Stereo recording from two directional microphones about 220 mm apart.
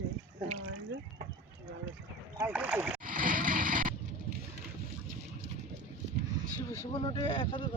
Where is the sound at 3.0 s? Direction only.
40° right (ahead or behind).